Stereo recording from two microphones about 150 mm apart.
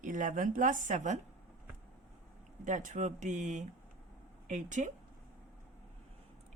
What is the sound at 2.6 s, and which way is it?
Speech, 55° right (ahead or behind).